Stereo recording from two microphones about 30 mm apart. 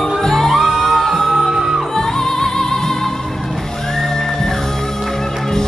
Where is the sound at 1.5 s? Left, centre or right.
Centre.